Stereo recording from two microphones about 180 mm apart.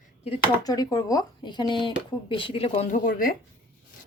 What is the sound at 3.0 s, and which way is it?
Speech, 50° left (ahead or behind).